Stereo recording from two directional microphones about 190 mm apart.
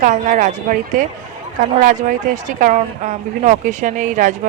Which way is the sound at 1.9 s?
40° right (ahead or behind).